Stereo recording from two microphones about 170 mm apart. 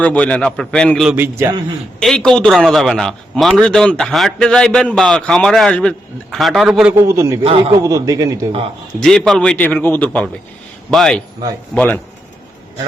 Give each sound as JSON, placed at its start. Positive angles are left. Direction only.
{"t": 0.0, "sound": "a man's voice", "side_deg": 10}
{"t": 1.1, "sound": "a man's voice", "side_deg": -10}
{"t": 2.0, "sound": "a man's voice", "side_deg": 5}
{"t": 6.9, "sound": "a man's voice", "side_deg": -15}
{"t": 9.0, "sound": "a man's voice", "side_deg": 5}